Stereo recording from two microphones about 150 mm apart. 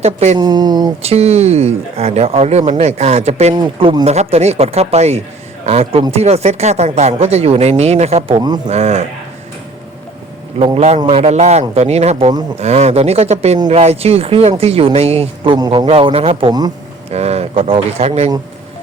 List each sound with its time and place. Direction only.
0.0 s speech: 45° right (ahead or behind)
0.3 s speech: 25° right (ahead or behind)
1.0 s speech: 45° right (ahead or behind)
3.5 s speech: 35° right (ahead or behind)
10.8 s speech: 45° right (ahead or behind)
15.5 s speech: 25° right (ahead or behind)
15.9 s speech: 40° right (ahead or behind)
16.5 s speech: 25° right (ahead or behind)
17.1 s speech: 45° right (ahead or behind)